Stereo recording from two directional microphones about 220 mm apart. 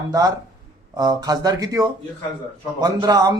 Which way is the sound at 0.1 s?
15° right (ahead or behind).